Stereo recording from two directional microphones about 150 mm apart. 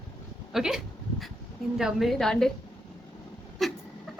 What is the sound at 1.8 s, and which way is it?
Speech, centre (ahead or behind).